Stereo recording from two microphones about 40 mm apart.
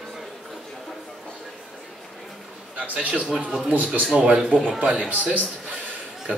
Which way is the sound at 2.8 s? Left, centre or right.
Right.